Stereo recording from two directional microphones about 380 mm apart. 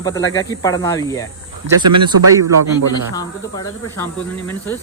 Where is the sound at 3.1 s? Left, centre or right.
Centre.